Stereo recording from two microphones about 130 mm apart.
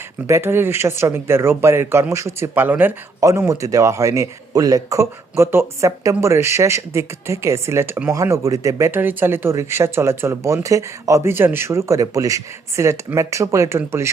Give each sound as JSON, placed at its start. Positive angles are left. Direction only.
{"t": 0.3, "sound": "speech", "side_deg": -20}
{"t": 8.1, "sound": "speech", "side_deg": -25}